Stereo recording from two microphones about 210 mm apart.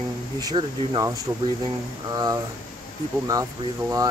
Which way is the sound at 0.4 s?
20° right (ahead or behind).